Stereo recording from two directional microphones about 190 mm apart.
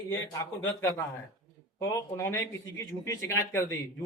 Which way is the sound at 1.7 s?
15° left (ahead or behind).